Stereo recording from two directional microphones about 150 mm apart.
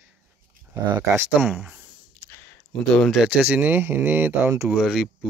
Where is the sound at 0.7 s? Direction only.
25° right (ahead or behind).